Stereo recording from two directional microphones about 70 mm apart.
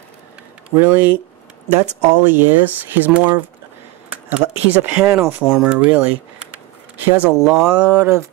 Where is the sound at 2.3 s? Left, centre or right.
Right.